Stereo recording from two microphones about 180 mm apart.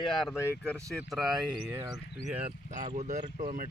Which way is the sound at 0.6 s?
15° right (ahead or behind).